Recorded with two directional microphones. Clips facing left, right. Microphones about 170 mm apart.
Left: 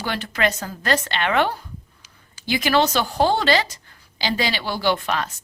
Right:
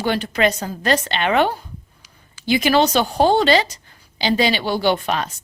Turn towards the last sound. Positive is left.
turn(degrees=-20)  # may be behind; listen again after turning